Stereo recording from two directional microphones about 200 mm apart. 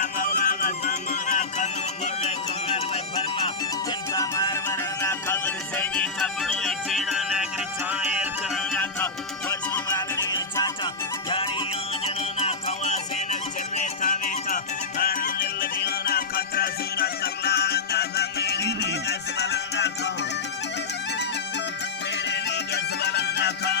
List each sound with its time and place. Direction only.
0.0 s music: 40° left (ahead or behind)
4.1 s music: 15° left (ahead or behind)
12.0 s music: 30° left (ahead or behind); by 19.9 s 55° left (ahead or behind)
22.3 s music: 55° left (ahead or behind)